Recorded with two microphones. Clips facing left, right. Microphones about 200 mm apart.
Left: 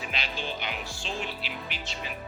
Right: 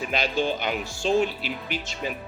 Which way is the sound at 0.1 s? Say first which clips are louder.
Right 12 dB; 45° right (ahead or behind).